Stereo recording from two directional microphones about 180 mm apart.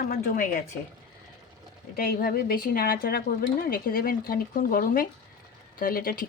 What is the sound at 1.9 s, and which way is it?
A woman's voice, 55° left (ahead or behind).